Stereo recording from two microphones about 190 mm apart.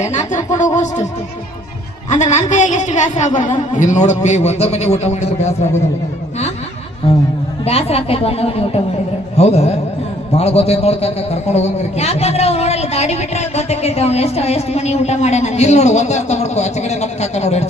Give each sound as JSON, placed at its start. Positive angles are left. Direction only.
{"t": 0.0, "sound": "speech", "side_deg": 40}
{"t": 2.0, "sound": "a man's voice", "side_deg": 40}
{"t": 7.6, "sound": "a man's voice", "side_deg": 30}